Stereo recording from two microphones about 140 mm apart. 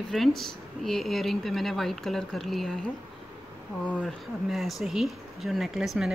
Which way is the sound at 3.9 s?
10° left (ahead or behind).